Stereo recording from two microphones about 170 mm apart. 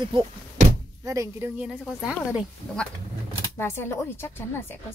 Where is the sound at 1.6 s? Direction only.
5° right (ahead or behind).